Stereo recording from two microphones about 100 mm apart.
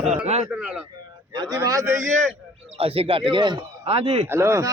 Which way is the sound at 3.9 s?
90° right.